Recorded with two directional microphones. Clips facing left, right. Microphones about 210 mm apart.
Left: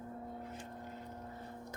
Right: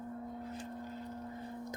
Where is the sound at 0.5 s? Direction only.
35° right (ahead or behind).